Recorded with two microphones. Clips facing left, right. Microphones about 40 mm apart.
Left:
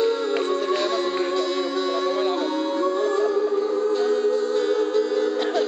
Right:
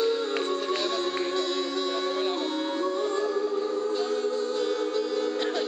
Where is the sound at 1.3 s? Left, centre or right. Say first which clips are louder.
Left 5 dB; centre.